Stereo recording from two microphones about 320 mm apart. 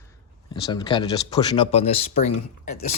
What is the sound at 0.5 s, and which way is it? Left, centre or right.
Speech, centre.